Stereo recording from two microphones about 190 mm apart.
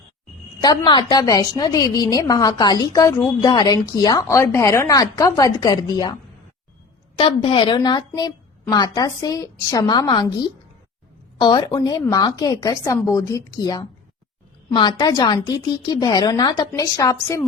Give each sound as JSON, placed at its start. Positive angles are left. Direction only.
{"t": 0.6, "sound": "a woman's voice", "side_deg": 20}
{"t": 7.2, "sound": "a woman's voice", "side_deg": 30}